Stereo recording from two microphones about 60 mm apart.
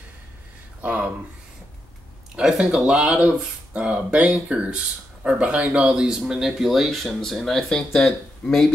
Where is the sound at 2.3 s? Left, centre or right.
Centre.